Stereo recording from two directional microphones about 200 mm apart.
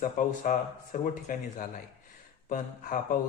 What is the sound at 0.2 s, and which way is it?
Speech, 40° left (ahead or behind).